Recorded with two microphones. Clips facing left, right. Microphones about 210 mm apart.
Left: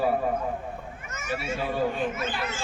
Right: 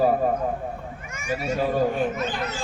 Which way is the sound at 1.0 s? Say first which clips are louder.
Right 2 dB; 10° right (ahead or behind).